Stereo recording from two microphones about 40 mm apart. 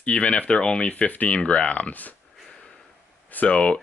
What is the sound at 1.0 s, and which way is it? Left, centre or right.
Speech, left.